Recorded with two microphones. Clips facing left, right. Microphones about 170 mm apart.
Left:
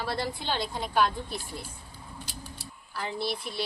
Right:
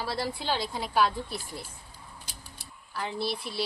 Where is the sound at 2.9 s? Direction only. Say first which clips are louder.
Even; centre (ahead or behind).